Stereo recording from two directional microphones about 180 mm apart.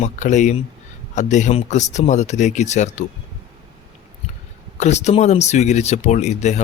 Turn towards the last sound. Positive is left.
turn(degrees=40)  # may be behind; listen again after turning